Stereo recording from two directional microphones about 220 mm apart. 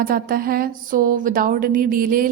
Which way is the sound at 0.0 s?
40° right (ahead or behind).